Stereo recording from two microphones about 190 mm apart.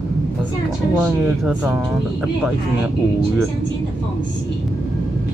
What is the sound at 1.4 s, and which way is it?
Speech, centre (ahead or behind).